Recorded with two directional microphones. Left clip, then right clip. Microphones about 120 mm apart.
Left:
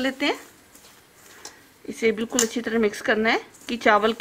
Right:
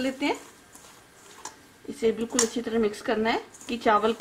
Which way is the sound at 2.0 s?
40° left (ahead or behind).